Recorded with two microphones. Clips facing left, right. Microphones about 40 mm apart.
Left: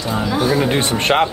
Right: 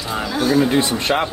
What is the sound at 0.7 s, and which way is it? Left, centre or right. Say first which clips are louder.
Speech: left 2 dB; left.